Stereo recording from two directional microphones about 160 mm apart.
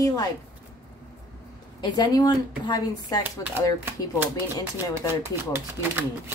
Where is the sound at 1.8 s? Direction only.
25° left (ahead or behind).